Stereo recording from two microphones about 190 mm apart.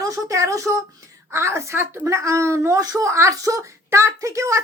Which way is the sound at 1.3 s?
15° right (ahead or behind).